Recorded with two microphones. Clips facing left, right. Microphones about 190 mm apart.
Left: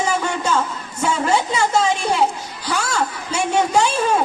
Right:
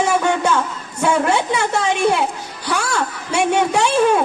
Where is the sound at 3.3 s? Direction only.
65° right (ahead or behind).